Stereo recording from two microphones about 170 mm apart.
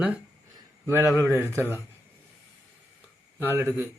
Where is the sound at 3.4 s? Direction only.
15° right (ahead or behind).